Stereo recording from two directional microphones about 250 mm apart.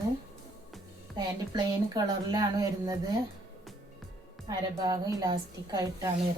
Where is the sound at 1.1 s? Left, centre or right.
Centre.